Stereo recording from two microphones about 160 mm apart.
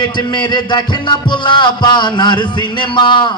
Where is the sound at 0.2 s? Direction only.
30° left (ahead or behind).